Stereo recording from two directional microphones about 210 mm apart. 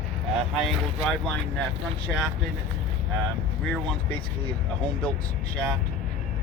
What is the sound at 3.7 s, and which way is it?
Speech, 5° left (ahead or behind).